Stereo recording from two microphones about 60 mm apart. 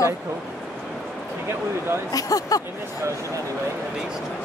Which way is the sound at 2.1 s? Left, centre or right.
Left.